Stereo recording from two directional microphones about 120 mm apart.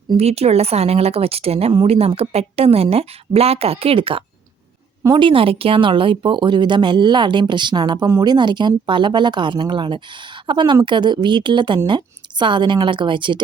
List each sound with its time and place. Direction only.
0.2 s a woman's voice: 60° right (ahead or behind); by 13.4 s 40° right (ahead or behind)